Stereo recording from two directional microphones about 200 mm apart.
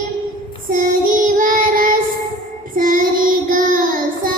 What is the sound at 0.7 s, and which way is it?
Child singing, 40° right (ahead or behind).